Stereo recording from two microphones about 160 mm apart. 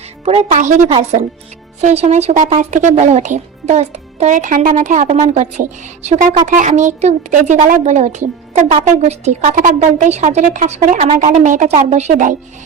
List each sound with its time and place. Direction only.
0.3 s a child's voice: 45° right (ahead or behind)
1.8 s a child's voice: 40° right (ahead or behind)